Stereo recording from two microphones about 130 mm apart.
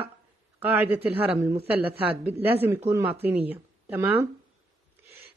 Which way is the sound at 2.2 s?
15° right (ahead or behind).